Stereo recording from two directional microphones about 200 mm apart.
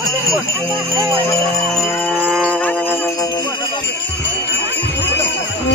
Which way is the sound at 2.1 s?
5° right (ahead or behind).